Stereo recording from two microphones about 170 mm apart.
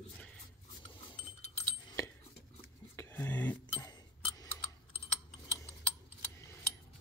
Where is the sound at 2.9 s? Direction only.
10° left (ahead or behind).